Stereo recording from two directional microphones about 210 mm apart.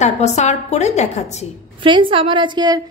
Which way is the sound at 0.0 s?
35° left (ahead or behind).